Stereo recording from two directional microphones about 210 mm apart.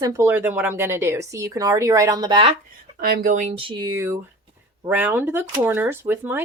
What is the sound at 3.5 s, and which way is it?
Speech, 20° right (ahead or behind).